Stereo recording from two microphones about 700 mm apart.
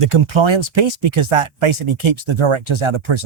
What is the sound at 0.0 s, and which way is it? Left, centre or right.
Speech, right.